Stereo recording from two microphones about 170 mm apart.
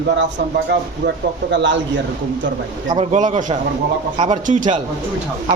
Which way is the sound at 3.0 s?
45° right (ahead or behind).